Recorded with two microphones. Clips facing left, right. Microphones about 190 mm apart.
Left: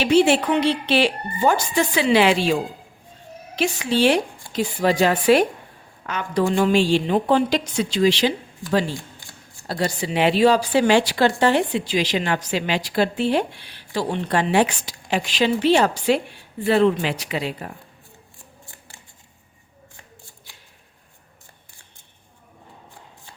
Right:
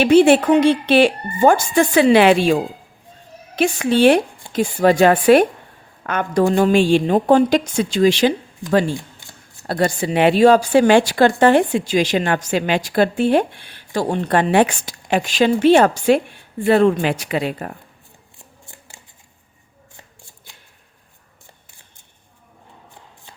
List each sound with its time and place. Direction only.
0.0 s a woman's voice: 55° right (ahead or behind)
6.4 s a woman's voice: 45° right (ahead or behind)
9.6 s a woman's voice: 55° right (ahead or behind)